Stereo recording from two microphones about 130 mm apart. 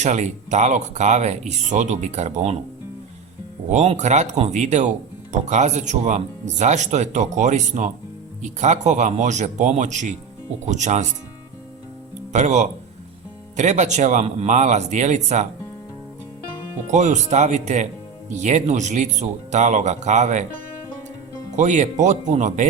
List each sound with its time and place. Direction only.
0.0 s speech: 65° right (ahead or behind)
3.7 s speech: 60° right (ahead or behind)
12.3 s speech: 60° right (ahead or behind)
16.9 s speech: 65° right (ahead or behind)
21.5 s speech: 70° right (ahead or behind)